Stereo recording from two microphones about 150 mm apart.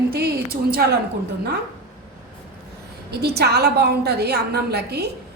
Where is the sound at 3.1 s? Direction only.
90° right.